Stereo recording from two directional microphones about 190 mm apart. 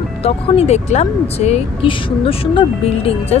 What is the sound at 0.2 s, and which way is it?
Speech, 35° left (ahead or behind).